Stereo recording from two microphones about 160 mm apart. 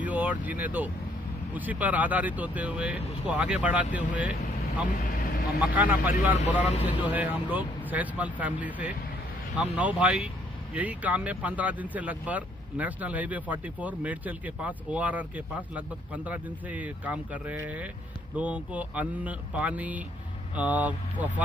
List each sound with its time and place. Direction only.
0.0 s speech: 10° right (ahead or behind)